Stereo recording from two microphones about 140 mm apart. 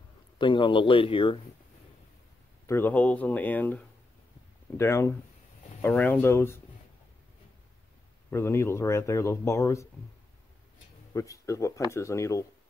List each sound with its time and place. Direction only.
0.4 s speech: 35° left (ahead or behind)
2.6 s speech: 15° left (ahead or behind)
8.3 s speech: 20° left (ahead or behind)
11.1 s speech: 20° left (ahead or behind)